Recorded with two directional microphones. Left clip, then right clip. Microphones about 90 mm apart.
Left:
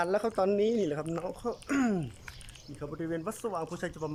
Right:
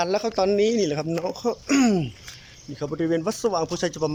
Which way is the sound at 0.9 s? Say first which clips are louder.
Right 8 dB; 10° right (ahead or behind).